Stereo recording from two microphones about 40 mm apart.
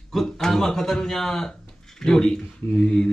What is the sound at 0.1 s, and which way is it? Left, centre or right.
Speech, centre.